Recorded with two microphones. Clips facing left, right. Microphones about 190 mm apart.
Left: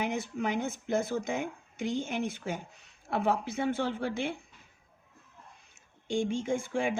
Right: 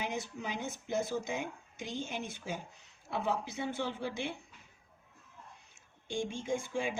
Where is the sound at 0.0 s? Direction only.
55° left (ahead or behind).